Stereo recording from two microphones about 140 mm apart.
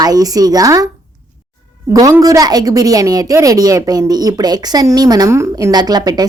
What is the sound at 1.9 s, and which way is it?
A woman's voice, 25° right (ahead or behind).